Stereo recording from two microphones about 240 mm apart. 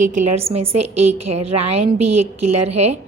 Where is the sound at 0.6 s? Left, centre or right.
Right.